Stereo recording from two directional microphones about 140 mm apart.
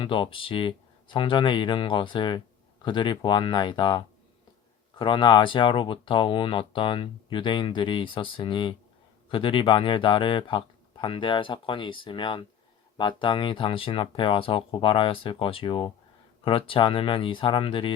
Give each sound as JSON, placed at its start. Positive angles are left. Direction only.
{"t": 0.0, "sound": "speech", "side_deg": 40}